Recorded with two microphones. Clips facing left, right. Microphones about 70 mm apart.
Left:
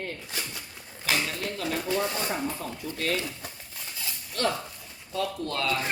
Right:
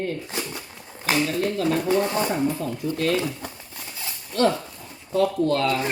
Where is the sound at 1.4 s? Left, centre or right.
Right.